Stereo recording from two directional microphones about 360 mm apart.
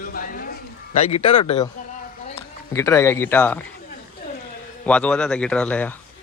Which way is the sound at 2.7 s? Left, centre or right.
Centre.